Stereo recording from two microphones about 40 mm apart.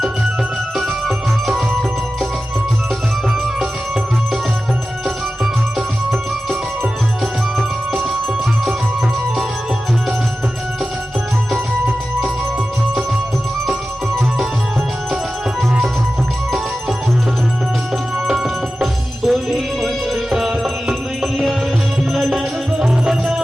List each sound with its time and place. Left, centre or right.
0.8 s music: centre
18.3 s music: centre
22.8 s music: centre